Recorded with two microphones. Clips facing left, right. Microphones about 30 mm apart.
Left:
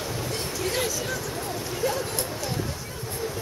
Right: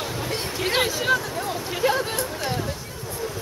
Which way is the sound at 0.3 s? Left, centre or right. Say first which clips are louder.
Right 5 dB; right.